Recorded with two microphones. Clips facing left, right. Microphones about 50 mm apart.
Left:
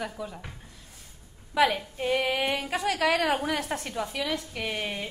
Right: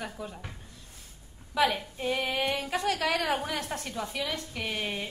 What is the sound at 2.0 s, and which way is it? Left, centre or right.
Female singing, left.